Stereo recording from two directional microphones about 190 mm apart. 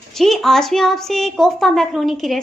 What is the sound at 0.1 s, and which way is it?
A woman's voice, centre (ahead or behind).